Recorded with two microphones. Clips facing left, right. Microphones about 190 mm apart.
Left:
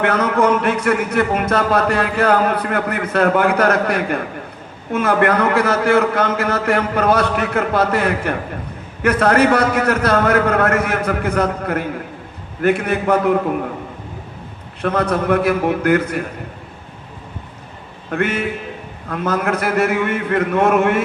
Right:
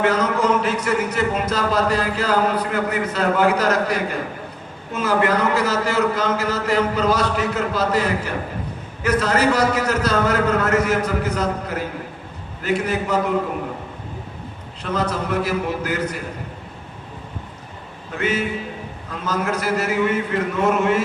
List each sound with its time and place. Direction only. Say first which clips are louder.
0.0 s a man's voice: left 3 dB; 60° left (ahead or behind)
14.8 s a man's voice: left 5 dB; 60° left (ahead or behind)
18.1 s a man's voice: left 3 dB; 55° left (ahead or behind)